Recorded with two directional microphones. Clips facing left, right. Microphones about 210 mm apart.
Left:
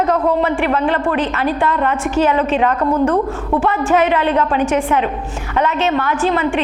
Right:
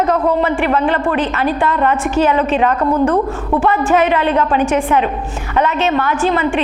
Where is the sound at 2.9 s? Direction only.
25° right (ahead or behind).